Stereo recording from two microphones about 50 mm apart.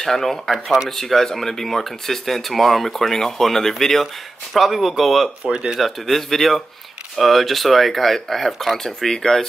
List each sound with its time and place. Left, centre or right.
0.0 s speech: centre
5.4 s speech: centre
5.8 s speech: centre